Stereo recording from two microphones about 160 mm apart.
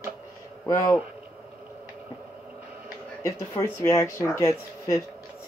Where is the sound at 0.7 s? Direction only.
20° left (ahead or behind).